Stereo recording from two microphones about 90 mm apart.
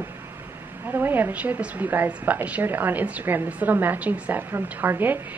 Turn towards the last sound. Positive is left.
turn(degrees=-20)  # may be behind; listen again after turning